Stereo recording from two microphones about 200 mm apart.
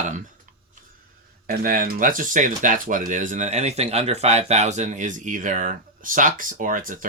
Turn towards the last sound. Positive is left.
turn(degrees=-40)  # may be behind; listen again after turning